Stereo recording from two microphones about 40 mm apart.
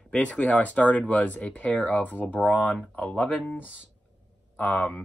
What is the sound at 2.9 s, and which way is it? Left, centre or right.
Speech, left.